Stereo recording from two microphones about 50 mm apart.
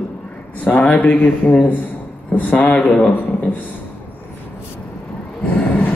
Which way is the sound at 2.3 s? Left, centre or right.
Left.